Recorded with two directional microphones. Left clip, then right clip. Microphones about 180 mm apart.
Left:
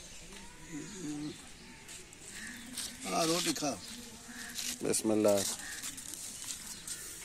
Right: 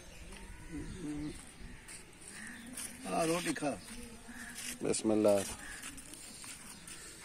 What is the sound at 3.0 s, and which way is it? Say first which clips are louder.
Speech: left 2 dB; 15° right (ahead or behind).